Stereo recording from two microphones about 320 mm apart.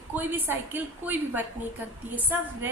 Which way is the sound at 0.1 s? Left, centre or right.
Centre.